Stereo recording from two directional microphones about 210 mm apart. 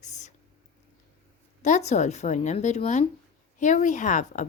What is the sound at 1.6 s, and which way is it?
A woman's voice, 35° left (ahead or behind).